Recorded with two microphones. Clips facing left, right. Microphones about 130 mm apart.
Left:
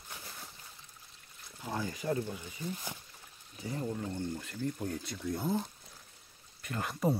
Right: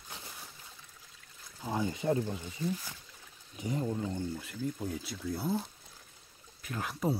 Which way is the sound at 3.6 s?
20° right (ahead or behind).